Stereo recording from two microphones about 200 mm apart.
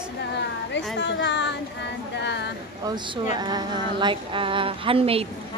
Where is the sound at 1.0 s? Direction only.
60° left (ahead or behind).